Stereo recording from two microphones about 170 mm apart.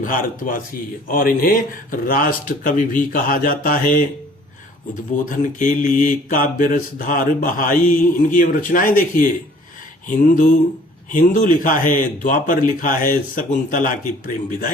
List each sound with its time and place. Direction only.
0.0 s mantra: 55° left (ahead or behind)
1.0 s speech: 55° left (ahead or behind)
5.1 s mantra: 50° left (ahead or behind)